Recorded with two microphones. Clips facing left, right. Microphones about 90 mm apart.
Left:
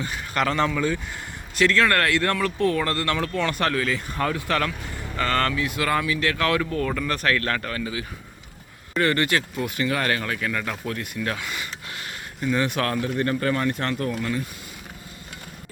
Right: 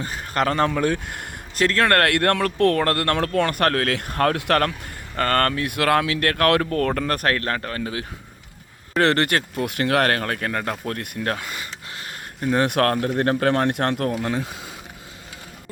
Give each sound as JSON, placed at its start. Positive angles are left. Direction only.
{"t": 0.0, "sound": "speech", "side_deg": -40}
{"t": 1.5, "sound": "speech", "side_deg": -45}
{"t": 7.3, "sound": "a man's voice", "side_deg": -30}
{"t": 9.0, "sound": "speech", "side_deg": -65}
{"t": 12.4, "sound": "speech", "side_deg": -55}